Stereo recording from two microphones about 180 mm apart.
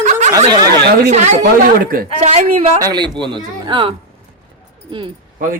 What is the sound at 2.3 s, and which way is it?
Speech, 35° right (ahead or behind).